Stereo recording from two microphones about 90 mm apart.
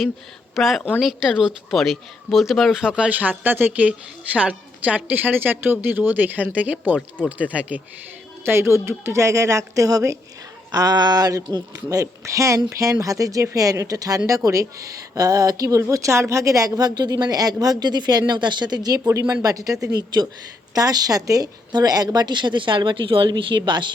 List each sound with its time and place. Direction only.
0.5 s speech: centre (ahead or behind)
8.4 s speech: 30° right (ahead or behind); by 23.3 s 75° right (ahead or behind)
23.3 s speech: 60° right (ahead or behind)